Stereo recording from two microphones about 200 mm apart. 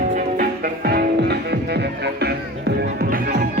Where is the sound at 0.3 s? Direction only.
50° right (ahead or behind).